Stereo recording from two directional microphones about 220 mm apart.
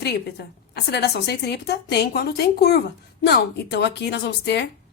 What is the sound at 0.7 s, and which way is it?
A woman's voice, 50° left (ahead or behind).